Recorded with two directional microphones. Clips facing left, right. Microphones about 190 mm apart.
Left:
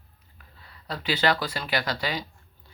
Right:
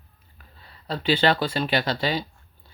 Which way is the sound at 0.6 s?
30° right (ahead or behind).